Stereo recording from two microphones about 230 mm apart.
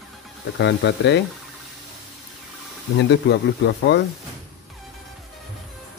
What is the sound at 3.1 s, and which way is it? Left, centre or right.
Speech, left.